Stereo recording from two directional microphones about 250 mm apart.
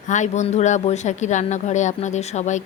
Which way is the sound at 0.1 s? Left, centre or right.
Left.